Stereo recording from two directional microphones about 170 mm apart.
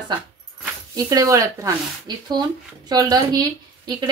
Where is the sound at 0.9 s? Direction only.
20° right (ahead or behind).